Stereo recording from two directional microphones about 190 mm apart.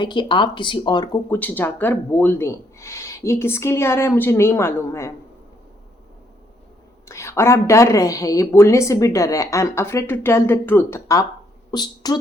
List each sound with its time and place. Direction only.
0.0 s speech: 25° left (ahead or behind)
1.3 s speech: 10° left (ahead or behind)
7.1 s speech: 15° left (ahead or behind)